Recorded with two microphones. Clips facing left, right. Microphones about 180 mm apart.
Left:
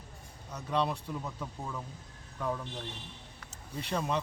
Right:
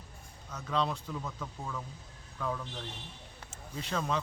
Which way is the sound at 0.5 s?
10° left (ahead or behind).